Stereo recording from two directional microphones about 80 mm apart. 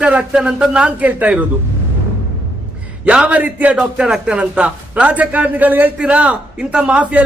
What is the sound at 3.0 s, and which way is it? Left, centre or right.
A man's voice, centre.